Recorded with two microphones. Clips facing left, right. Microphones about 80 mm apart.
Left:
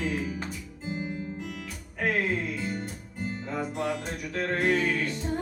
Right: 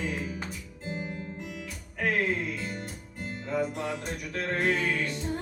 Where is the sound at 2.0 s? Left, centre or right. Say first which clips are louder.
Even; centre.